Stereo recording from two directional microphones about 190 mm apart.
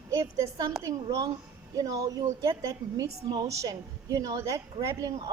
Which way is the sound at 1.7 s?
20° right (ahead or behind).